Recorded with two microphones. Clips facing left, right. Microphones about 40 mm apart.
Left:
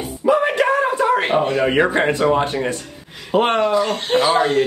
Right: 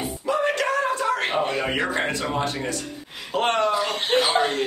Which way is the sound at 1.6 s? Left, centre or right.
Left.